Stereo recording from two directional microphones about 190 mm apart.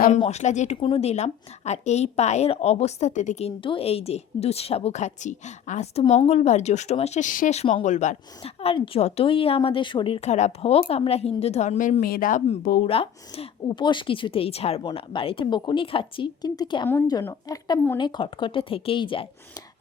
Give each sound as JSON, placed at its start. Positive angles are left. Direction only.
{"t": 0.1, "sound": "a woman's voice", "side_deg": 35}
{"t": 12.8, "sound": "a woman's voice", "side_deg": 30}